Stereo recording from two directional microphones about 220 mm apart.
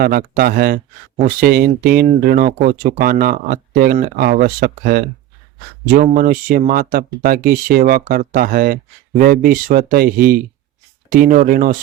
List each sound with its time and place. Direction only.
0.0 s speech: 45° right (ahead or behind)